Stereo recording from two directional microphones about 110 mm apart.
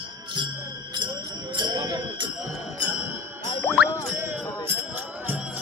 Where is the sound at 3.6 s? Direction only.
5° left (ahead or behind).